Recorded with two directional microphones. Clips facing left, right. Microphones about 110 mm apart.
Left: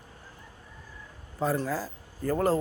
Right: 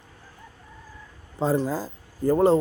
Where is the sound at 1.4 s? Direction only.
25° right (ahead or behind).